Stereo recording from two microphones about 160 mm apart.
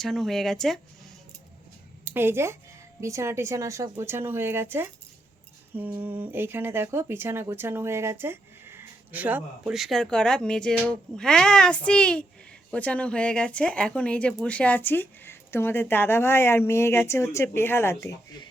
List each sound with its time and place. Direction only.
0.0 s speech: centre (ahead or behind)
2.0 s speech: 15° right (ahead or behind); by 18.4 s 20° left (ahead or behind)